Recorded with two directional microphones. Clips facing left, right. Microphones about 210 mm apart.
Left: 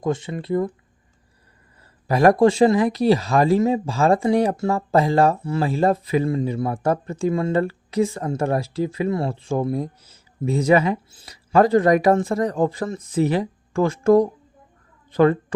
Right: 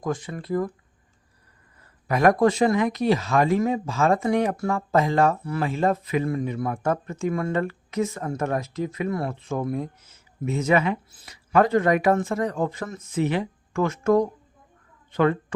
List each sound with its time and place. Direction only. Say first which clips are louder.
0.0 s speech: left 4 dB; 25° left (ahead or behind)
2.0 s speech: left 4 dB; 30° left (ahead or behind)